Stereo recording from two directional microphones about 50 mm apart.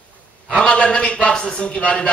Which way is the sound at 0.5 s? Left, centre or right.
Left.